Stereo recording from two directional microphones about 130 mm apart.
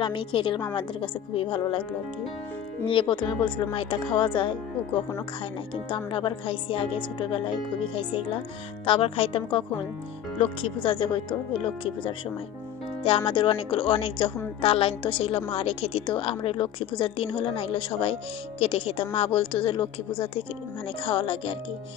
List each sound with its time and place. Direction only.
0.0 s a woman's voice: 40° left (ahead or behind)
2.8 s a woman's voice: 40° left (ahead or behind)